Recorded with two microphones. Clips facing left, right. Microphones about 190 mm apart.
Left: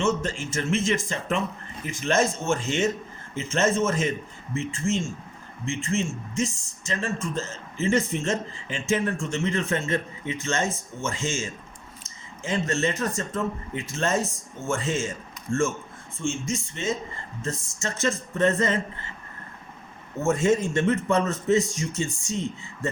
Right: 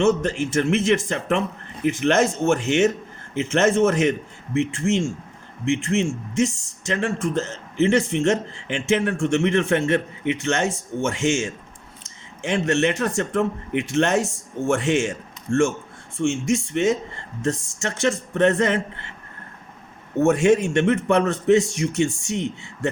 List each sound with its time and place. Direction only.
0.0 s speech: 65° right (ahead or behind)
16.1 s speech: 70° right (ahead or behind)
20.1 s speech: 70° right (ahead or behind)